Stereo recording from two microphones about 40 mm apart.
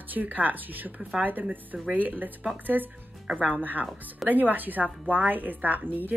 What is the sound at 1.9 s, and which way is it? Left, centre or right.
Speech, right.